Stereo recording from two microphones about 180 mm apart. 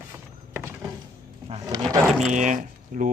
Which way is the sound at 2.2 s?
40° right (ahead or behind).